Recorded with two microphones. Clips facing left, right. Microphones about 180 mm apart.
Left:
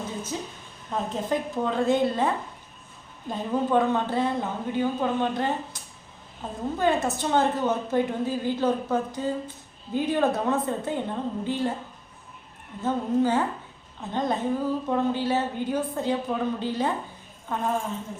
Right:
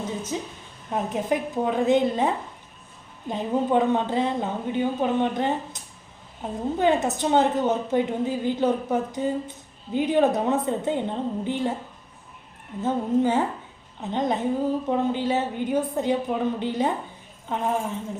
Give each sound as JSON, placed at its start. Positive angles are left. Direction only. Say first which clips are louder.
{"t": 0.3, "sound": "a woman's voice", "louder": "right 3 dB", "side_deg": -20}
{"t": 12.8, "sound": "a woman's voice", "louder": "right 1 dB", "side_deg": -20}